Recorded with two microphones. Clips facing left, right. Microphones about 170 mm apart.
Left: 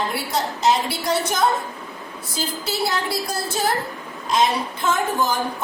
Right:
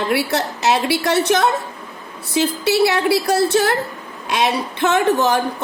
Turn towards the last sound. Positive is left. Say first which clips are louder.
# right 6 dB
turn(degrees=-75)  # may be behind; listen again after turning